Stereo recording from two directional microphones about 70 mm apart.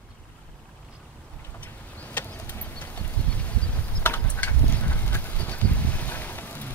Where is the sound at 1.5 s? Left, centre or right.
Left.